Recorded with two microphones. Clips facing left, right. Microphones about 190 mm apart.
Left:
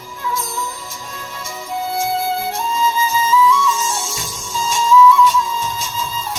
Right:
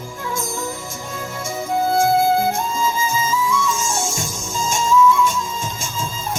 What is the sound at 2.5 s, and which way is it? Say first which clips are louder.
Music: left 1 dB; 50° right (ahead or behind).